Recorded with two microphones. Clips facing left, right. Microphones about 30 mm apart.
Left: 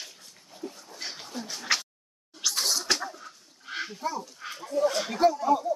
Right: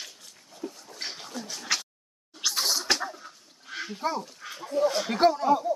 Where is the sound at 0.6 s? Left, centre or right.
Right.